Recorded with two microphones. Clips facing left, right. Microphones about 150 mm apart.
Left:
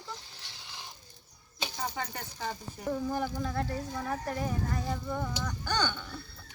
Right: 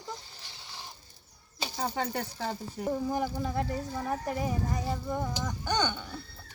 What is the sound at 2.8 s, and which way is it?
Speech, 15° right (ahead or behind).